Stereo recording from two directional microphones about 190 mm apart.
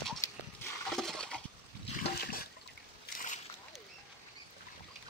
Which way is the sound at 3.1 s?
55° left (ahead or behind).